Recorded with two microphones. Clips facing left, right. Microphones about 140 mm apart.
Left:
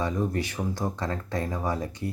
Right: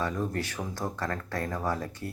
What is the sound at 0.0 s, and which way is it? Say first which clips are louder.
Speech: left 3 dB; 15° left (ahead or behind).